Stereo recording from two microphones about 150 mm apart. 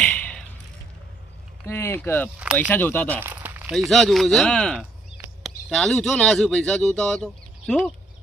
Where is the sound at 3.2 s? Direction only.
10° right (ahead or behind).